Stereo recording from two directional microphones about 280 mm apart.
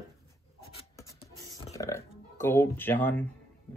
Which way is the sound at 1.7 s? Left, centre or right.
Centre.